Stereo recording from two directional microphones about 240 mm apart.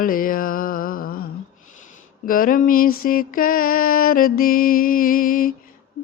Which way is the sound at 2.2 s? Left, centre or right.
Left.